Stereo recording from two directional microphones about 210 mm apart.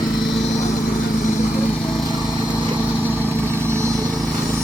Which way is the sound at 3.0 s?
10° right (ahead or behind).